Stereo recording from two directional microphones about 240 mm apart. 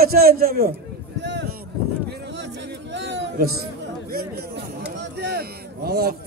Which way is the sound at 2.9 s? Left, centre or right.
Right.